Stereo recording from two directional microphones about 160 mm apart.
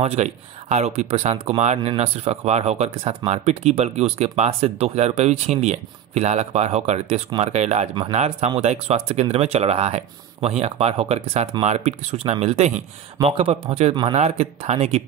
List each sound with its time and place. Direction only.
0.0 s speech: 45° right (ahead or behind)